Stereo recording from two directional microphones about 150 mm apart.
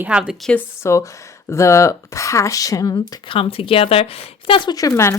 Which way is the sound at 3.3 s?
35° left (ahead or behind).